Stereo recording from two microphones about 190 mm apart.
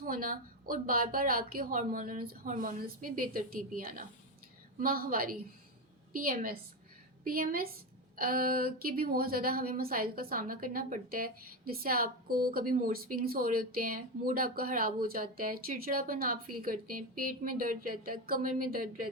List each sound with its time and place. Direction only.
0.0 s a woman's voice: 45° right (ahead or behind)